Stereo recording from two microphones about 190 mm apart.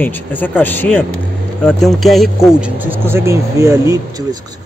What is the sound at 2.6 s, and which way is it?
Speech, 10° right (ahead or behind).